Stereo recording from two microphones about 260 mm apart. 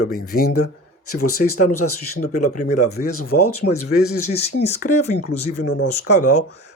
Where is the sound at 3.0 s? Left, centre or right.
Left.